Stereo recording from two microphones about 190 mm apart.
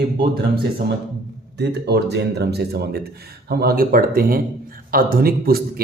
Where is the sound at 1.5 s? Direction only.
60° right (ahead or behind).